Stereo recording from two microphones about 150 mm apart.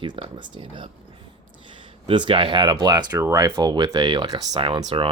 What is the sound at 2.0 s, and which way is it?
Speech, 35° right (ahead or behind).